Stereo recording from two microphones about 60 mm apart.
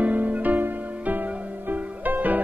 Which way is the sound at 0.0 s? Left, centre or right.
Right.